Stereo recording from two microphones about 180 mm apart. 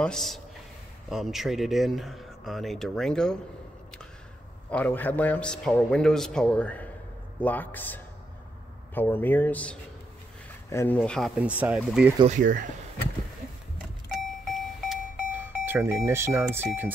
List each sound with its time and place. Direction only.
0.0 s speech: centre (ahead or behind)
4.6 s a man's voice: 10° left (ahead or behind)
12.3 s speech: 45° right (ahead or behind)
14.5 s a sound: centre (ahead or behind)
15.3 s speech: 10° right (ahead or behind)